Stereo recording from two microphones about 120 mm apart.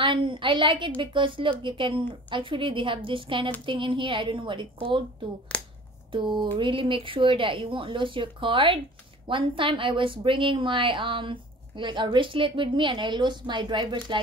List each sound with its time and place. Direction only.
0.0 s a woman's voice: 45° right (ahead or behind)
5.5 s finger snapping: 10° left (ahead or behind)
6.1 s a woman's voice: 40° right (ahead or behind)